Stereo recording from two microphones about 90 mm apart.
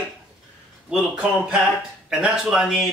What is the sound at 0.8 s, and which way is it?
Speech, 10° right (ahead or behind).